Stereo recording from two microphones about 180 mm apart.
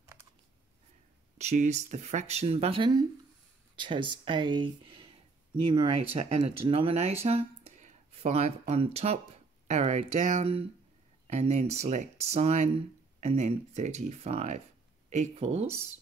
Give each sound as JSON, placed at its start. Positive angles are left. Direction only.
{"t": 1.4, "sound": "speech", "side_deg": -40}